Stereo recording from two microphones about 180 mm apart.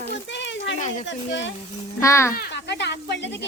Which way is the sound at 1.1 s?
80° left.